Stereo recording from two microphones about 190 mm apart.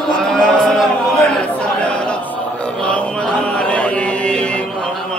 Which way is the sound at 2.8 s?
5° left (ahead or behind).